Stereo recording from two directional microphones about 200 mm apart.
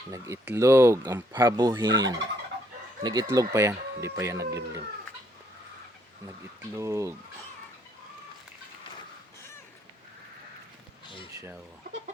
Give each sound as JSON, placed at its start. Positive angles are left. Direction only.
{"t": 0.1, "sound": "speech", "side_deg": -15}
{"t": 6.7, "sound": "speech", "side_deg": -15}